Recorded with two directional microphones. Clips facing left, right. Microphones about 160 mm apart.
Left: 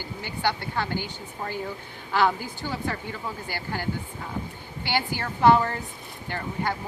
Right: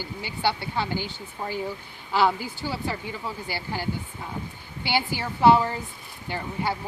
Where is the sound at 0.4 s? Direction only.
15° right (ahead or behind).